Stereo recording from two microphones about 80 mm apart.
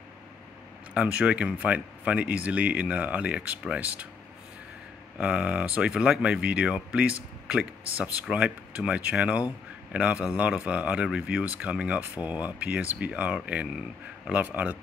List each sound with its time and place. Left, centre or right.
0.9 s speech: centre
5.1 s speech: centre